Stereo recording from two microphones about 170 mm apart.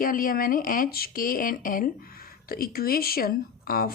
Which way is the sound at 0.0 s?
55° left (ahead or behind).